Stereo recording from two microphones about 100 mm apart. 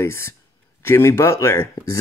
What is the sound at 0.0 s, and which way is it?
Speech, 25° left (ahead or behind).